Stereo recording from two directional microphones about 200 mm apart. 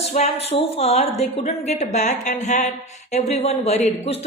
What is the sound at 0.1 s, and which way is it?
Speech, 30° left (ahead or behind).